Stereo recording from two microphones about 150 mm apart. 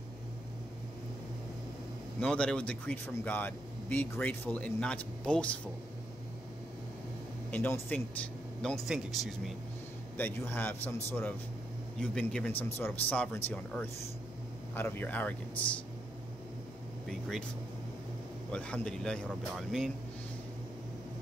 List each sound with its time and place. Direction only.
2.1 s speech: 5° left (ahead or behind)
7.5 s speech: 10° left (ahead or behind)
10.1 s speech: 10° left (ahead or behind)
17.1 s speech: 5° left (ahead or behind)
18.5 s speech: 5° left (ahead or behind)